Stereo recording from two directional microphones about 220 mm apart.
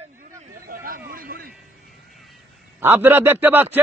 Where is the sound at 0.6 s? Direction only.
40° right (ahead or behind).